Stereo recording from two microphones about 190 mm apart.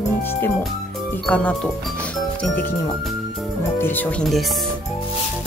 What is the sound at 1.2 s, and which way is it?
Speech, 5° left (ahead or behind).